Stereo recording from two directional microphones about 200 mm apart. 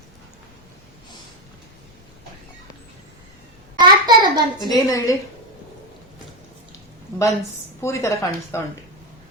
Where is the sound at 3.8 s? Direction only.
20° right (ahead or behind).